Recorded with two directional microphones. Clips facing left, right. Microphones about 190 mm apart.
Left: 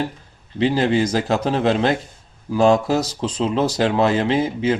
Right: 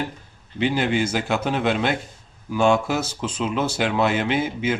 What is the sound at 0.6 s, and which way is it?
Speech, 35° left (ahead or behind).